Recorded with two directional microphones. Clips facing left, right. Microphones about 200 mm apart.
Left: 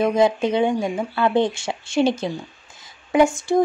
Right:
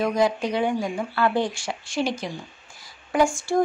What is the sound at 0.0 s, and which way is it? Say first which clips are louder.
Speech: left 4 dB; 25° left (ahead or behind).